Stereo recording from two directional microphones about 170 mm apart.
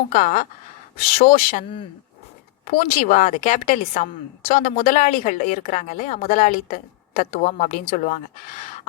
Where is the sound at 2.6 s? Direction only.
55° left (ahead or behind).